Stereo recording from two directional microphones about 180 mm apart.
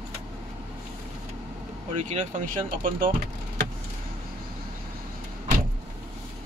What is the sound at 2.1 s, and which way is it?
Speech, 45° right (ahead or behind).